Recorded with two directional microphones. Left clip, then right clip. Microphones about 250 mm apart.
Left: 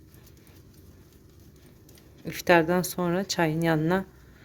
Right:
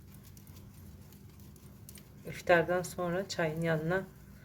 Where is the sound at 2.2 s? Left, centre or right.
Left.